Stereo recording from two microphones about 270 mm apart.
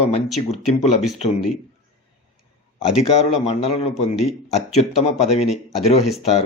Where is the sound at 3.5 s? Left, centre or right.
Left.